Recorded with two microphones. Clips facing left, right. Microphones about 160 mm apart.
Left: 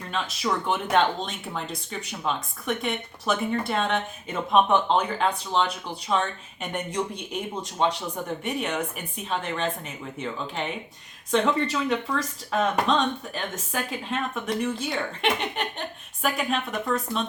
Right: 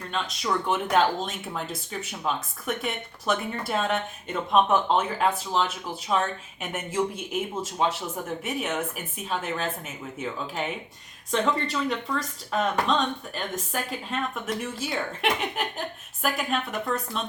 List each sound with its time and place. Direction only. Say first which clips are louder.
0.1 s speech: left 1 dB; centre (ahead or behind)